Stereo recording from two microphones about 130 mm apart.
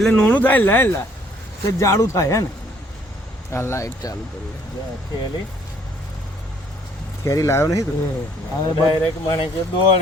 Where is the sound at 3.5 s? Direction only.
20° left (ahead or behind).